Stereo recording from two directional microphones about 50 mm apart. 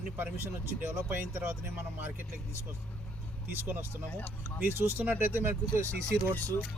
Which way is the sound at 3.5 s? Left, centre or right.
Right.